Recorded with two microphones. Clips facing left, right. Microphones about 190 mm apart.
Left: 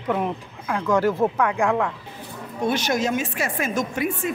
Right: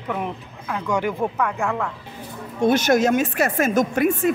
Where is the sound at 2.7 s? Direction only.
50° right (ahead or behind).